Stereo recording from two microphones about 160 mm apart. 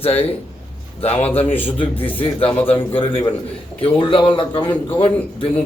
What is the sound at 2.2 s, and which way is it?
A man's voice, 35° left (ahead or behind).